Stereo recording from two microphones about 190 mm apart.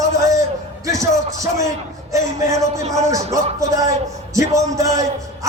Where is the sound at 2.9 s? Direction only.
15° right (ahead or behind).